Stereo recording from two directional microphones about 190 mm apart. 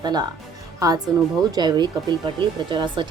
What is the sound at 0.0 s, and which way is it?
A woman's voice, 20° right (ahead or behind).